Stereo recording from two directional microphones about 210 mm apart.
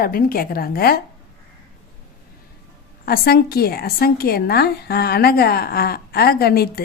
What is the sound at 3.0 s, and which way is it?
A woman's voice, 45° left (ahead or behind).